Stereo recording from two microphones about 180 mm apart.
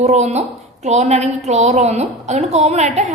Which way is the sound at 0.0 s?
40° right (ahead or behind).